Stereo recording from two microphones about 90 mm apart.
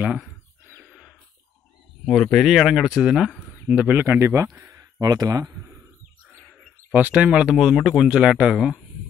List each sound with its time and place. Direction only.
0.0 s speech: 15° right (ahead or behind)
2.0 s speech: 5° left (ahead or behind)
3.6 s speech: 15° right (ahead or behind)
5.0 s speech: 40° right (ahead or behind)
6.9 s speech: 20° right (ahead or behind)